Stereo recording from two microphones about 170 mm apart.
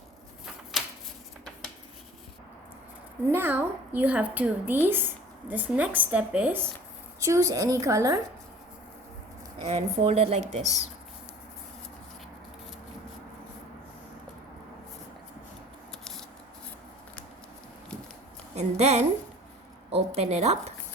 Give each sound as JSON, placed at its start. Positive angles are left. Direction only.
{"t": 0.7, "sound": "a sound", "side_deg": 0}
{"t": 3.3, "sound": "a woman's voice", "side_deg": -10}
{"t": 9.6, "sound": "a woman's voice", "side_deg": -40}
{"t": 18.5, "sound": "a woman's voice", "side_deg": -40}